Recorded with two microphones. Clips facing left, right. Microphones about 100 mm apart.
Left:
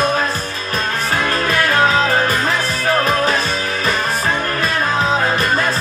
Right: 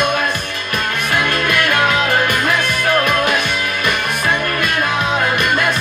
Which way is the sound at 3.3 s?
35° left (ahead or behind).